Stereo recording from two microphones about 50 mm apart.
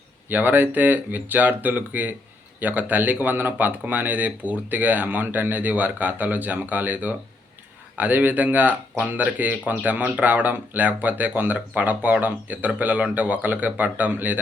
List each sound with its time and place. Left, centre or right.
0.3 s speech: right